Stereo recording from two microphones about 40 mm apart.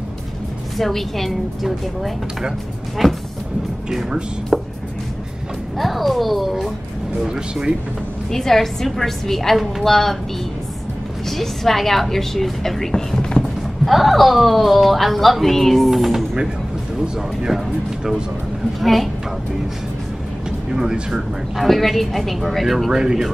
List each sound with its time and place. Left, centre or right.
0.7 s speech: centre
4.5 s a sound: centre
5.8 s speech: centre
8.3 s a woman's voice: centre
11.2 s a woman's voice: centre
13.4 s speech: centre
18.8 s speech: centre
20.7 s speech: centre
21.5 s speech: centre
22.8 s speech: centre